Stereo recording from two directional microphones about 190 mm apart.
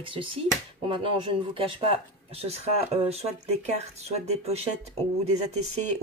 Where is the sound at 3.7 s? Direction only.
35° right (ahead or behind).